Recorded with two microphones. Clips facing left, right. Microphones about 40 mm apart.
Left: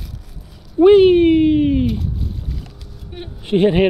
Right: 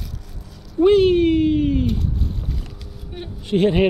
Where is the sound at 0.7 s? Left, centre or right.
Left.